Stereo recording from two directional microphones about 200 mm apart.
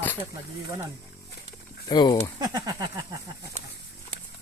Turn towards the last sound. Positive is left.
turn(degrees=-20)  # may be behind; listen again after turning